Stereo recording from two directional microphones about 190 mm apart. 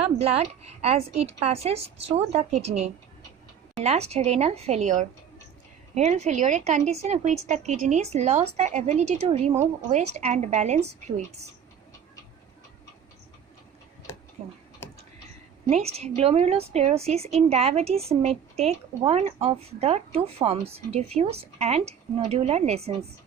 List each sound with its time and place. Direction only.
0.0 s speech: 30° right (ahead or behind)
14.1 s a sound: 20° left (ahead or behind)
15.7 s speech: 35° right (ahead or behind)